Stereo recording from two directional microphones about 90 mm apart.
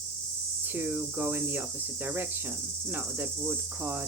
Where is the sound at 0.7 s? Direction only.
20° right (ahead or behind).